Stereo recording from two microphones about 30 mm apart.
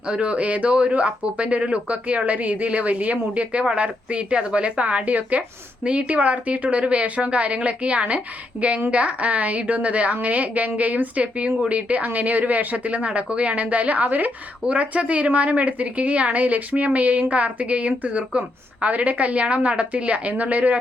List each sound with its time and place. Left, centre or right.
0.1 s a woman's voice: right
11.1 s a woman's voice: right
12.0 s speech: right
12.7 s a woman's voice: right
13.2 s a woman's voice: right
14.7 s a woman's voice: right
18.9 s a woman's voice: right